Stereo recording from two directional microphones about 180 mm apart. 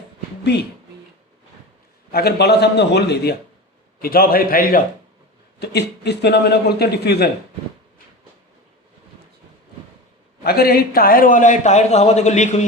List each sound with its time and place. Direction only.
2.1 s a man's voice: 65° left (ahead or behind)
4.0 s a man's voice: 55° left (ahead or behind)
5.5 s a man's voice: 65° left (ahead or behind)
10.4 s a man's voice: 60° left (ahead or behind); by 12.6 s 40° left (ahead or behind)